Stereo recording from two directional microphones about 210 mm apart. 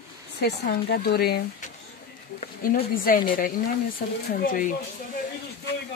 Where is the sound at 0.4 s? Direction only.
50° left (ahead or behind).